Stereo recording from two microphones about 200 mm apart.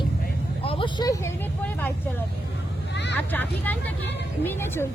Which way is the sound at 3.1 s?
10° left (ahead or behind).